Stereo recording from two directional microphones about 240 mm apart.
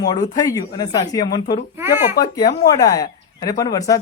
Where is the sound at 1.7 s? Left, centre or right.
Centre.